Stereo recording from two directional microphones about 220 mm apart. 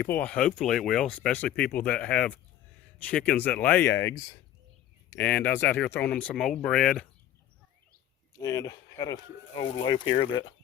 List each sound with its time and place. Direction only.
0.1 s speech: 5° left (ahead or behind)
8.4 s speech: 15° left (ahead or behind)